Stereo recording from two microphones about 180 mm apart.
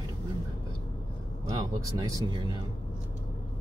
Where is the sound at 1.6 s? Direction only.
20° right (ahead or behind).